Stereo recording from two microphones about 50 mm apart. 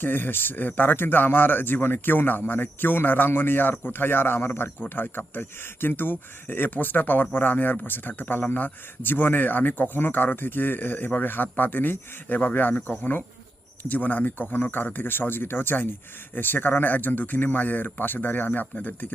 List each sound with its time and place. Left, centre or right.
0.0 s speech: left
13.8 s speech: left